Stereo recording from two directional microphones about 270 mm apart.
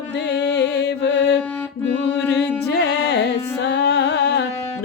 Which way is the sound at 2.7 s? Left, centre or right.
Left.